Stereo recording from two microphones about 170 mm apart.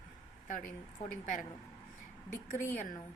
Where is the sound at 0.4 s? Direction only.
50° left (ahead or behind).